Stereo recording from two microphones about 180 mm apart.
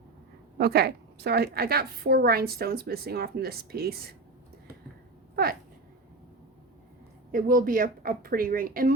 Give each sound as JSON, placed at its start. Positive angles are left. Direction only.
{"t": 0.6, "sound": "a woman's voice", "side_deg": -60}
{"t": 7.3, "sound": "speech", "side_deg": -50}